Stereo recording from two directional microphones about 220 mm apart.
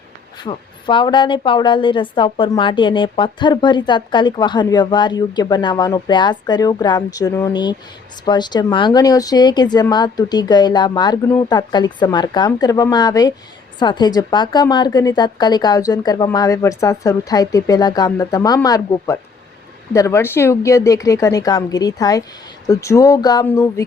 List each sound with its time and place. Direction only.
0.4 s a woman's voice: 20° left (ahead or behind)